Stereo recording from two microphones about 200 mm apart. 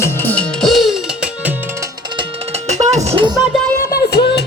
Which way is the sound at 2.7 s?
35° right (ahead or behind).